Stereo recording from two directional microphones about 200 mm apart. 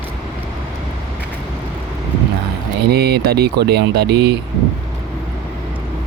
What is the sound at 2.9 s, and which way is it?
Speech, 55° right (ahead or behind).